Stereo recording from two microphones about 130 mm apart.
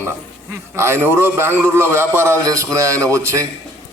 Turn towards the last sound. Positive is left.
turn(degrees=-20)  # may be behind; listen again after turning